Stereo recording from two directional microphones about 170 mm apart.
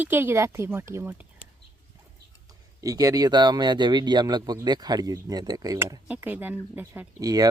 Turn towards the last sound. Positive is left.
turn(degrees=-20)  # may be behind; listen again after turning